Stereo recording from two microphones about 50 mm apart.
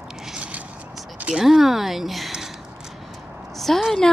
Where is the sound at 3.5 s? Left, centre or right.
Centre.